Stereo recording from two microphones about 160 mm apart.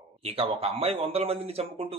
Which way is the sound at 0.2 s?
40° right (ahead or behind).